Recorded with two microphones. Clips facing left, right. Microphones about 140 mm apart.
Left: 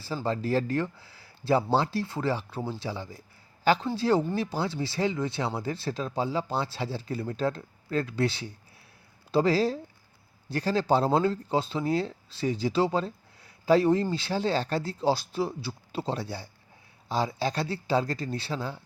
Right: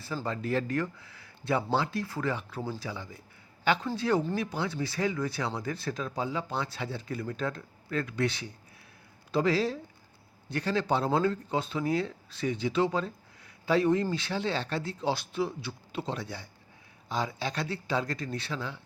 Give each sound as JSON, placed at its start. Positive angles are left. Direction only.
{"t": 0.3, "sound": "speech", "side_deg": 35}